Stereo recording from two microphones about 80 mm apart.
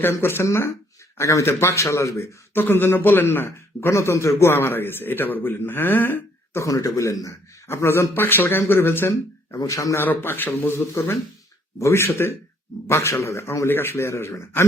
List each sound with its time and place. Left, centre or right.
0.0 s a man's voice: left
2.6 s a man's voice: left
6.6 s a man's voice: left
9.6 s a man's voice: left
10.0 s a man's voice: left
10.8 s a man's voice: left